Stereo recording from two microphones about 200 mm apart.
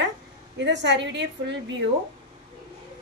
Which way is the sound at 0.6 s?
60° right (ahead or behind).